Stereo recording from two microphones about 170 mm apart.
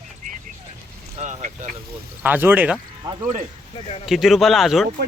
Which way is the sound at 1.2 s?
45° right (ahead or behind).